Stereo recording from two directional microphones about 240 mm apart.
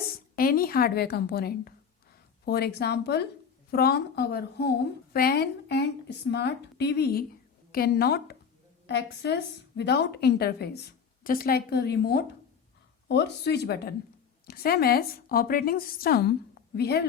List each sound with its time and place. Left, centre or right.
0.3 s a woman's voice: left